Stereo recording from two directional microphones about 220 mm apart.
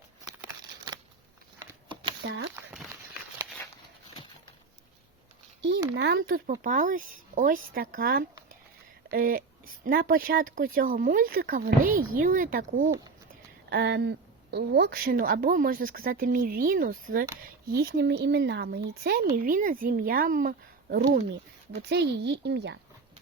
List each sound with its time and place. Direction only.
2.2 s speech: 55° right (ahead or behind)
5.9 s speech: 50° right (ahead or behind)
6.6 s a woman's voice: 35° right (ahead or behind)
13.7 s a woman's voice: 45° right (ahead or behind)